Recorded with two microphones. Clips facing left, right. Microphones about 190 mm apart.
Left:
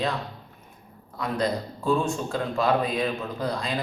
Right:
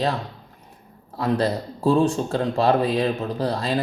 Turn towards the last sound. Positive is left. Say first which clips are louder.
# right 5 dB
turn(degrees=-35)  # may be behind; listen again after turning